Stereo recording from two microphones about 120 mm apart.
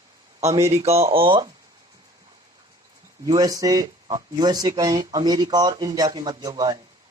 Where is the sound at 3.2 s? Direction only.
30° right (ahead or behind).